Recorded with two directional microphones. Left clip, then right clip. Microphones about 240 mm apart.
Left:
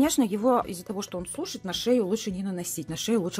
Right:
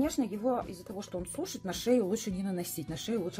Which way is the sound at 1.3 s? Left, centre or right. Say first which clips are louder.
Left 6 dB; centre.